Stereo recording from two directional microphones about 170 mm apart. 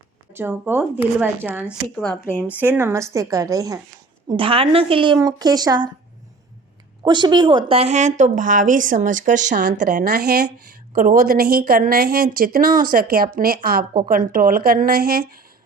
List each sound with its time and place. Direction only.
0.3 s speech: 15° right (ahead or behind)
2.0 s speech: 5° left (ahead or behind)
2.5 s speech: 10° right (ahead or behind)
4.3 s speech: 30° right (ahead or behind)
7.0 s a woman's voice: 25° right (ahead or behind); by 15.4 s 60° right (ahead or behind)